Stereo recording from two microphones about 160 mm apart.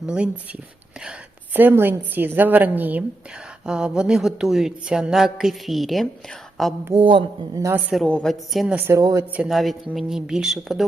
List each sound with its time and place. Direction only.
0.0 s speech: 5° right (ahead or behind)
1.5 s speech: 10° right (ahead or behind)
6.9 s a man's voice: 30° right (ahead or behind)
8.0 s speech: 5° left (ahead or behind); by 9.2 s 20° right (ahead or behind)
9.3 s speech: 5° right (ahead or behind)